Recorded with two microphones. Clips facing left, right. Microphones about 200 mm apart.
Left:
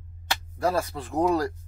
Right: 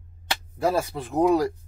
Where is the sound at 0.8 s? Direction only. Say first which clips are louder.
Right 3 dB; 20° right (ahead or behind).